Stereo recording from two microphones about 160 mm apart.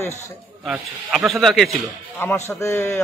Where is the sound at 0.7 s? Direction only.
Centre (ahead or behind).